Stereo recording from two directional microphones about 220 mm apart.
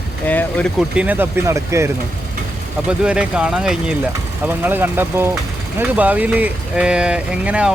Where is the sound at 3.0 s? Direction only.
5° right (ahead or behind).